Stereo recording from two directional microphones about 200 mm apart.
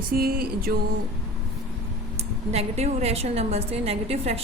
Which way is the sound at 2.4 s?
35° right (ahead or behind).